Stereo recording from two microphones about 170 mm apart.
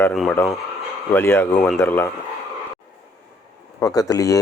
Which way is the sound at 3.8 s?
20° left (ahead or behind).